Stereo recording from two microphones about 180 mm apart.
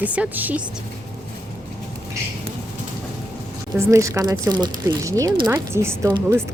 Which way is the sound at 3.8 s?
15° right (ahead or behind).